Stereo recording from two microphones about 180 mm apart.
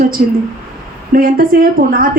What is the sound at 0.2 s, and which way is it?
A woman's voice, 55° right (ahead or behind).